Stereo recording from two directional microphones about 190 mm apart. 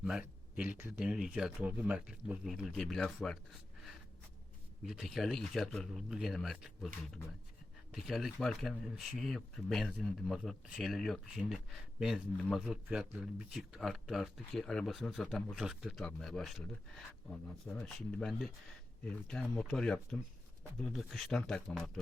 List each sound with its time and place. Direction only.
0.0 s speech: 5° right (ahead or behind)
4.9 s speech: centre (ahead or behind)
7.9 s speech: centre (ahead or behind)